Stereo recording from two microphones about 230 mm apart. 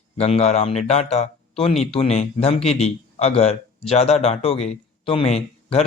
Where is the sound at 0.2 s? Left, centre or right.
Left.